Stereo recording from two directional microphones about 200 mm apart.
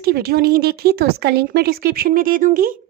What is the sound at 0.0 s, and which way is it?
A woman's voice, 50° right (ahead or behind).